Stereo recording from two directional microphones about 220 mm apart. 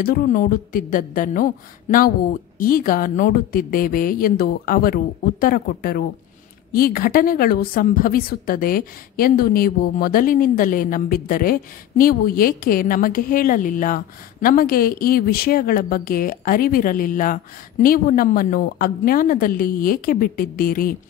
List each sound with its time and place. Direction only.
0.0 s a woman's voice: 40° left (ahead or behind)